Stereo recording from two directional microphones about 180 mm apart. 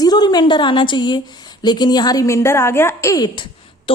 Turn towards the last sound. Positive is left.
turn(degrees=25)  # may be behind; listen again after turning